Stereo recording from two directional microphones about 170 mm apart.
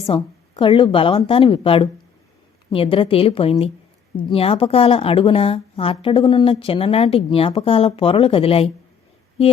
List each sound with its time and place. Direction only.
0.0 s a woman's voice: 30° left (ahead or behind)